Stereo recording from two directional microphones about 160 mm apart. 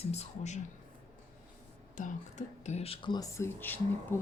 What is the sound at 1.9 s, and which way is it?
Speech, 50° left (ahead or behind).